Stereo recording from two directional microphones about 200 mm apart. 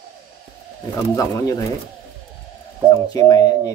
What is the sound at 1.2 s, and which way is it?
Speech, 15° left (ahead or behind).